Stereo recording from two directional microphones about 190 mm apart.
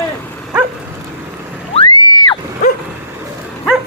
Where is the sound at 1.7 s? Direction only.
30° left (ahead or behind).